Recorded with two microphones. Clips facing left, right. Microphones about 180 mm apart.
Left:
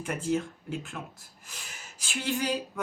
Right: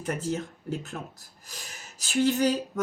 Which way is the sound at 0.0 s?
40° right (ahead or behind).